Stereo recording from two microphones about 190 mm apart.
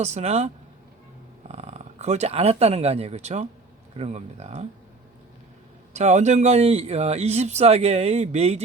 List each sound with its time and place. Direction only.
0.0 s a man's voice: 35° right (ahead or behind)
5.9 s a man's voice: 35° right (ahead or behind)